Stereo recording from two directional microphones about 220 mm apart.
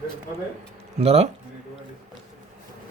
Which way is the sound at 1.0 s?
30° right (ahead or behind).